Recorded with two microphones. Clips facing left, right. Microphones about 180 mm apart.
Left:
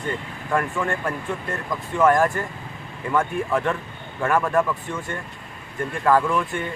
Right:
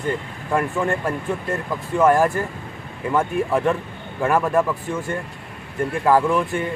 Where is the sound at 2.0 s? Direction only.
10° right (ahead or behind).